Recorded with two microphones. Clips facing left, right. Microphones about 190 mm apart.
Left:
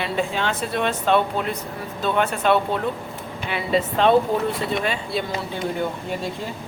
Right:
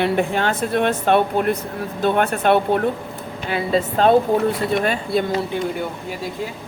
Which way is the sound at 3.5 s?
40° right (ahead or behind).